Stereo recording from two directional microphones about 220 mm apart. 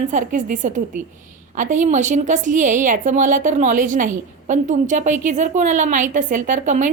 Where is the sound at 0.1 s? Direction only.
35° right (ahead or behind).